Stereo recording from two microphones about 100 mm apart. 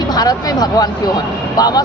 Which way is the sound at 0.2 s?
40° left (ahead or behind).